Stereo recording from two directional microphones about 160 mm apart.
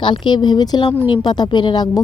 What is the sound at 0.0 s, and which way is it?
Speech, 30° left (ahead or behind).